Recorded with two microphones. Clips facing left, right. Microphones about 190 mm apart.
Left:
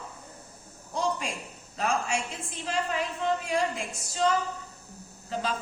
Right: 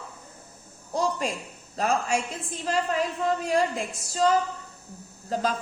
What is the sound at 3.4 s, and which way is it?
Speech, 40° right (ahead or behind).